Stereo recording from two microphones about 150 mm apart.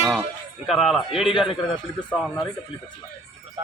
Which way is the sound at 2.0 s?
10° left (ahead or behind).